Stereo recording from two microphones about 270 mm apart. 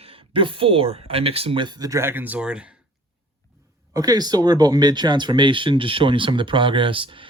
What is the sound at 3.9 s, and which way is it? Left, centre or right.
Speech, centre.